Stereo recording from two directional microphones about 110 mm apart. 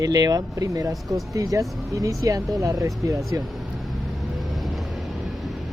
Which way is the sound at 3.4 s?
Centre (ahead or behind).